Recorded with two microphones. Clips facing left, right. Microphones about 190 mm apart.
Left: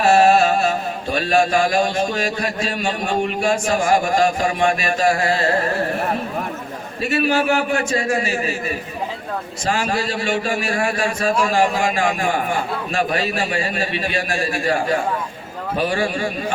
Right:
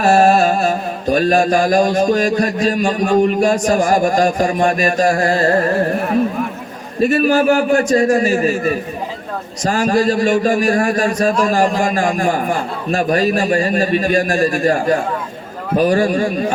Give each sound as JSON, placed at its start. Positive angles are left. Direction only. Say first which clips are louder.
{"t": 0.0, "sound": "mantra", "louder": "right 2 dB", "side_deg": -40}
{"t": 7.0, "sound": "a man's voice", "louder": "right 6 dB", "side_deg": -45}
{"t": 15.8, "sound": "mantra", "louder": "right 7 dB", "side_deg": -40}